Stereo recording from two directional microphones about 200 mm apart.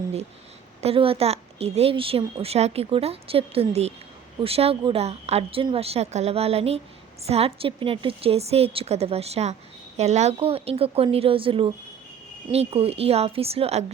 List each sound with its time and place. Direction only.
0.8 s a woman's voice: 30° right (ahead or behind)